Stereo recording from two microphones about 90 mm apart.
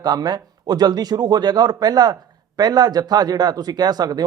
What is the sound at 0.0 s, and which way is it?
Speech, 50° right (ahead or behind).